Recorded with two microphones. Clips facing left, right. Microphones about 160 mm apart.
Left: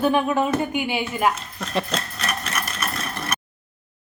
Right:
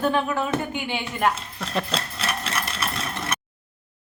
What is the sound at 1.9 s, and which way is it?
Sewing machine, 30° right (ahead or behind).